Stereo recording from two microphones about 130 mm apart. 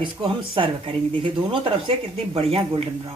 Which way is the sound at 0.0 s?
40° right (ahead or behind).